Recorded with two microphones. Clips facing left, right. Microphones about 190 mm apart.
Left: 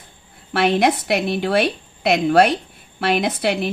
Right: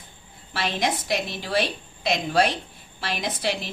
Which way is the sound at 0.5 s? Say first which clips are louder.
Left 9 dB; 60° left (ahead or behind).